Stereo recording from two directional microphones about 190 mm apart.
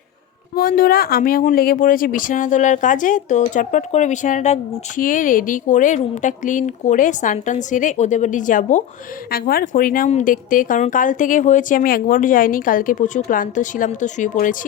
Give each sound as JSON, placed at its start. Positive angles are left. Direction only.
{"t": 0.5, "sound": "speech", "side_deg": 50}